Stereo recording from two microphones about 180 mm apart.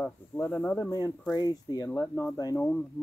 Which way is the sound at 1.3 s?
20° left (ahead or behind).